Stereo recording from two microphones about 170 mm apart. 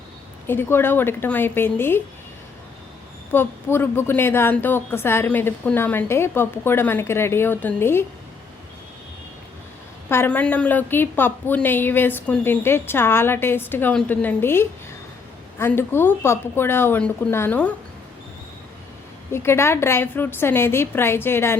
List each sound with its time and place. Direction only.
0.4 s a woman's voice: 15° left (ahead or behind)
3.3 s a woman's voice: 15° left (ahead or behind)
10.1 s a woman's voice: 10° left (ahead or behind)
19.3 s a woman's voice: 15° left (ahead or behind)